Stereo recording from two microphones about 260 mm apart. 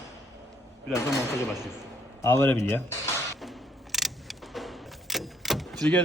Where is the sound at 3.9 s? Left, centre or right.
Centre.